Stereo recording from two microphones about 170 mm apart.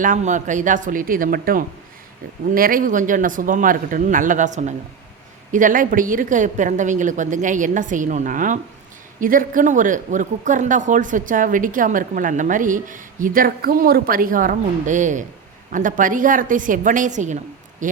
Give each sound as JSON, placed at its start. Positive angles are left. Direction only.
{"t": 0.0, "sound": "speech", "side_deg": -50}